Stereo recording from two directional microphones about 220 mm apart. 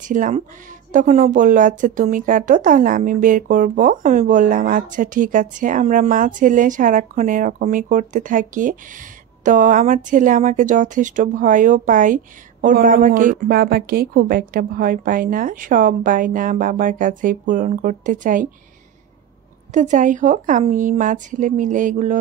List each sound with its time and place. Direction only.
0.0 s speech: 35° right (ahead or behind)
19.7 s speech: 35° right (ahead or behind)